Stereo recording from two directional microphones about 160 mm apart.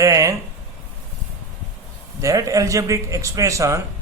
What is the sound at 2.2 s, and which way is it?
A man's voice, 20° right (ahead or behind).